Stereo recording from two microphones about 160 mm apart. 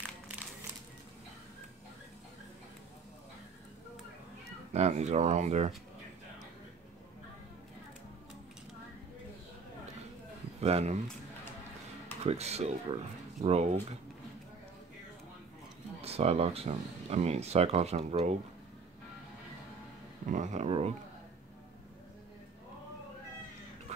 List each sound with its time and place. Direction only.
4.5 s speech: 45° right (ahead or behind)
10.6 s speech: 40° right (ahead or behind)
12.2 s speech: 40° right (ahead or behind)
16.0 s speech: 40° right (ahead or behind)
20.2 s speech: 50° right (ahead or behind)